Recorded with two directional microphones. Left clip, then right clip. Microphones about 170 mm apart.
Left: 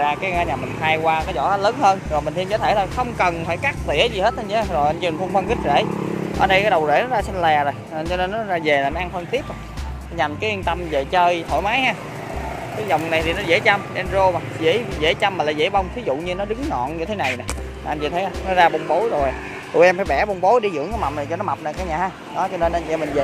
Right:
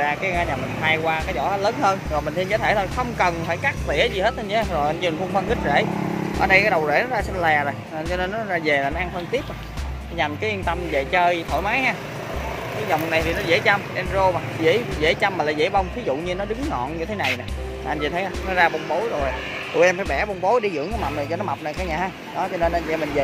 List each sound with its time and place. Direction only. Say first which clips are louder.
0.0 s speech: left 2 dB; 10° left (ahead or behind)
14.6 s speech: even; centre (ahead or behind)
17.8 s speech: left 2 dB; 10° left (ahead or behind)
19.8 s speech: left 4 dB; 25° left (ahead or behind)
21.3 s speech: left 2 dB; centre (ahead or behind)